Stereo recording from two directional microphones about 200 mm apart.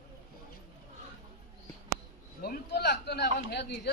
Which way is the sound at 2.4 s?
50° left (ahead or behind).